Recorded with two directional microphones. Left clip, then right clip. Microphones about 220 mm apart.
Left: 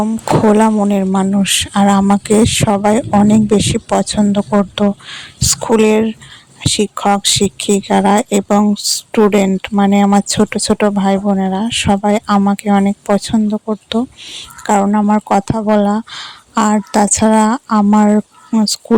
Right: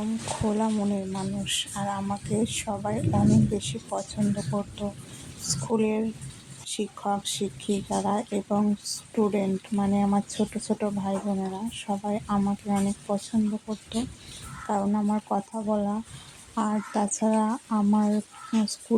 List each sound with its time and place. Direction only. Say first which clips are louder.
0.4 s speech: left 15 dB; 50° left (ahead or behind)
14.7 s speech: left 15 dB; 50° left (ahead or behind)